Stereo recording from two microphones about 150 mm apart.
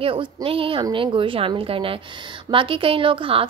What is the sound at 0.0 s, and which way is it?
A woman's voice, 35° right (ahead or behind).